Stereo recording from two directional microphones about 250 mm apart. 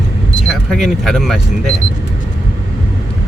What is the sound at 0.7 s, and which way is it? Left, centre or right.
Speech, centre.